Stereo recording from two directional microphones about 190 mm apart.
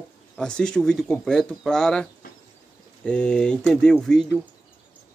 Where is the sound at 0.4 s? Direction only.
5° left (ahead or behind).